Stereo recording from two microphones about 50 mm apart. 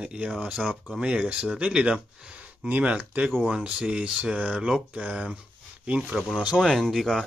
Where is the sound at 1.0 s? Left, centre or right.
Right.